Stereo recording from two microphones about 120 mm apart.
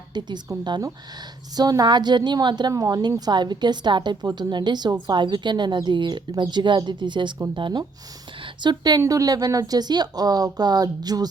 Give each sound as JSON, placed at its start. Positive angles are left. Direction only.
{"t": 0.1, "sound": "a woman's voice", "side_deg": -35}